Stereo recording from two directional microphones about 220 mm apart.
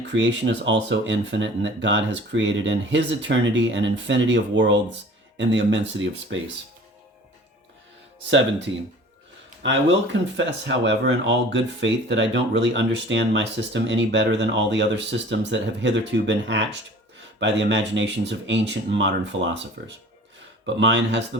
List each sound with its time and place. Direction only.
0.0 s speech: 55° right (ahead or behind)
9.6 s speech: 55° right (ahead or behind)
20.7 s speech: 55° right (ahead or behind)